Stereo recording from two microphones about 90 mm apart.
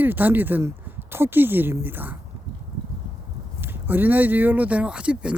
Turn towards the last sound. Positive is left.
turn(degrees=-15)  # may be behind; listen again after turning